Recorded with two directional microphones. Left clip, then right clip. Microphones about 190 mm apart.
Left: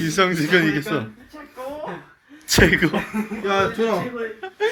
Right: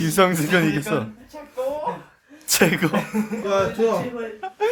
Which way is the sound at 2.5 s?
15° right (ahead or behind).